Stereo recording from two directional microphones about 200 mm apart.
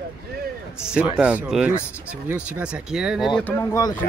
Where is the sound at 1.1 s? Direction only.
5° right (ahead or behind); by 3.9 s 15° left (ahead or behind).